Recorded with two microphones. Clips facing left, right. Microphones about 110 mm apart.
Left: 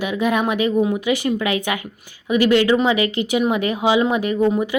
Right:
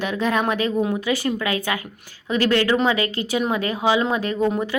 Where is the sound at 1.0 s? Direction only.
15° left (ahead or behind).